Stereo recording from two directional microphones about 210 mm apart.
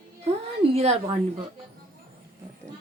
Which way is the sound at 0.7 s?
30° right (ahead or behind).